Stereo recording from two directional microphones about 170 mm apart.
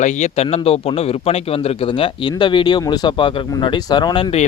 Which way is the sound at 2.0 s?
30° left (ahead or behind).